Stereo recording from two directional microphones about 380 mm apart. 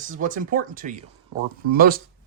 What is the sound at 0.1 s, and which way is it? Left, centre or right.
Speech, right.